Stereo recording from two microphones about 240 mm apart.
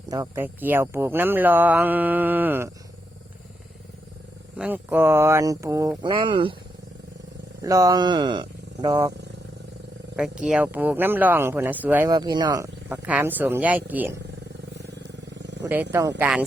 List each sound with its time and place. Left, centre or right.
0.1 s speech: centre
4.5 s speech: centre; by 6.6 s right
7.6 s speech: centre
10.2 s speech: centre
15.4 s vehicle: right
15.6 s speech: centre